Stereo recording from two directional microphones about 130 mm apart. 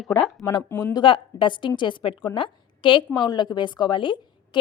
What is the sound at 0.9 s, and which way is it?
A woman's voice, 40° left (ahead or behind).